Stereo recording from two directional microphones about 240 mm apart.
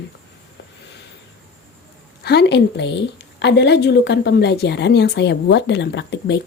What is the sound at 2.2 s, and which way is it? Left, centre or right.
Speech, left.